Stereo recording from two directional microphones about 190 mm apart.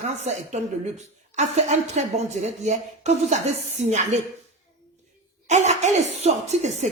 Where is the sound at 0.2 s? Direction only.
35° right (ahead or behind).